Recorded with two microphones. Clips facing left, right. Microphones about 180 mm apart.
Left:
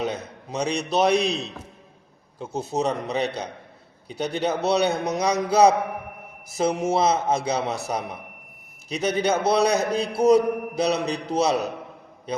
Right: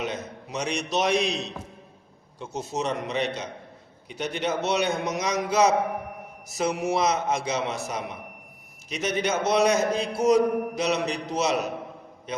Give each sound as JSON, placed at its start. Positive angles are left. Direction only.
{"t": 0.5, "sound": "a man's voice", "side_deg": 35}